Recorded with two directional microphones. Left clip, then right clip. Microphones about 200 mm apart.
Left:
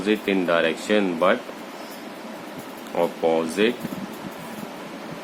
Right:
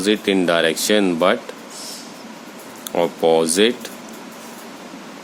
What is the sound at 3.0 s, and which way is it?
Speech, 45° right (ahead or behind).